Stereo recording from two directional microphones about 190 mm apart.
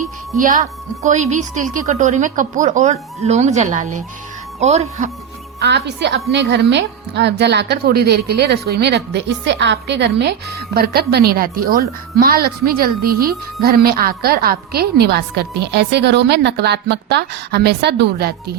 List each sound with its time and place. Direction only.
0.4 s a woman's voice: 40° right (ahead or behind)
5.5 s a woman's voice: 60° right (ahead or behind)